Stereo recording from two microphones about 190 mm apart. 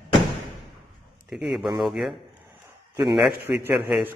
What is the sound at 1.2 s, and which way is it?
A man's voice, centre (ahead or behind).